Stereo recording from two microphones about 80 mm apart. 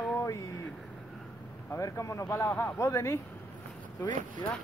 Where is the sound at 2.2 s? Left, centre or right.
Left.